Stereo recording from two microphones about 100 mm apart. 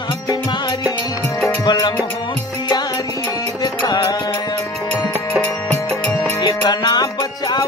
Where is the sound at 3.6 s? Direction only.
40° left (ahead or behind).